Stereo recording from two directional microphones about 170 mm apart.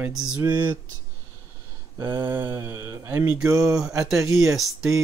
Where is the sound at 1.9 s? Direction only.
25° right (ahead or behind).